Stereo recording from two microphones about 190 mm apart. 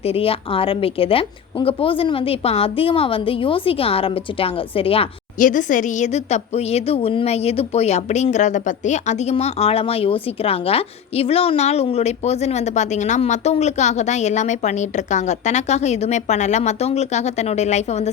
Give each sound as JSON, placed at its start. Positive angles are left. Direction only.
{"t": 0.0, "sound": "a woman's voice", "side_deg": 30}
{"t": 5.4, "sound": "a woman's voice", "side_deg": 45}